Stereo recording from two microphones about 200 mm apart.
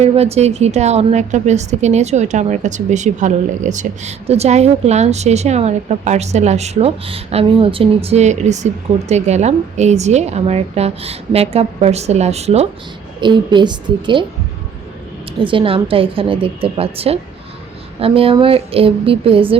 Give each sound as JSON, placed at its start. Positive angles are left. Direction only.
{"t": 0.0, "sound": "a woman's voice", "side_deg": -30}
{"t": 15.4, "sound": "a woman's voice", "side_deg": -25}